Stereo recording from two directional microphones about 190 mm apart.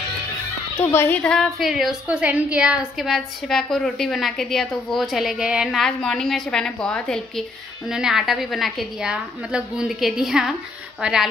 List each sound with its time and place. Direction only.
0.7 s a woman's voice: 10° left (ahead or behind); by 11.2 s 5° right (ahead or behind)